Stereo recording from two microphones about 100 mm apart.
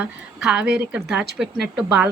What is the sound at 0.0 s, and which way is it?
A woman's voice, 10° right (ahead or behind).